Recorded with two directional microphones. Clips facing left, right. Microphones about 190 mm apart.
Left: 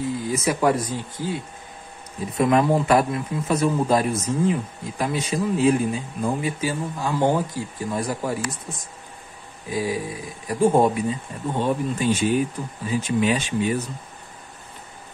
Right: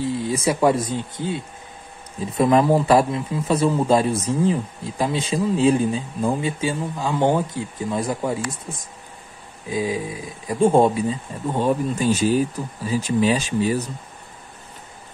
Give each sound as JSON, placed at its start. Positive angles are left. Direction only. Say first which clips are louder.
{"t": 0.0, "sound": "speech", "louder": "right 2 dB", "side_deg": -30}
{"t": 9.7, "sound": "speech", "louder": "right 1 dB", "side_deg": -20}
{"t": 11.6, "sound": "speech", "louder": "right 2 dB", "side_deg": -40}